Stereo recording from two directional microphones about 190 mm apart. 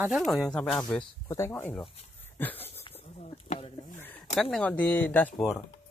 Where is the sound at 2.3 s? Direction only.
10° left (ahead or behind).